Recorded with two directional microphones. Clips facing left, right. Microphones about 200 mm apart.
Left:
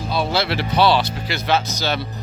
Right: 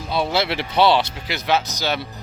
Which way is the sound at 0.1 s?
20° right (ahead or behind).